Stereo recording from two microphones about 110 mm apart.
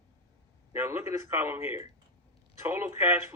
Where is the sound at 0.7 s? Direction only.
20° right (ahead or behind).